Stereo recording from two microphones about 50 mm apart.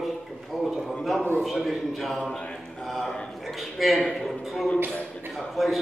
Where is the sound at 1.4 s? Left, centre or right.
Centre.